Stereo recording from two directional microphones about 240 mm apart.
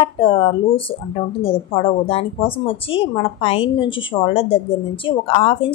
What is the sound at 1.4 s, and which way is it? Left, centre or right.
A woman's voice, left.